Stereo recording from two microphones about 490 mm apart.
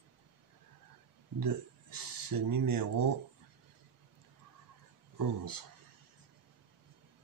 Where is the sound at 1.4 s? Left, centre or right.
Right.